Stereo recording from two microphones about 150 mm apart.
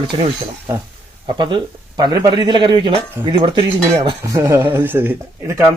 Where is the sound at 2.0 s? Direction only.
25° right (ahead or behind).